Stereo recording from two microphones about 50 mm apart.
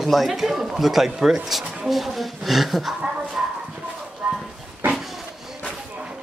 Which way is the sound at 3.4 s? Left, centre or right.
Right.